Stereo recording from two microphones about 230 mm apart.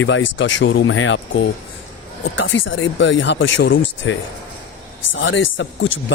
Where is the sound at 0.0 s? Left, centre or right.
Left.